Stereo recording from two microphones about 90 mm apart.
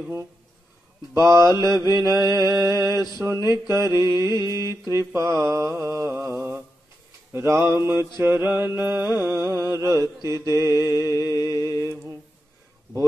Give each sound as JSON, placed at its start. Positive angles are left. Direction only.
{"t": 1.2, "sound": "mantra", "side_deg": -35}
{"t": 11.7, "sound": "mantra", "side_deg": 35}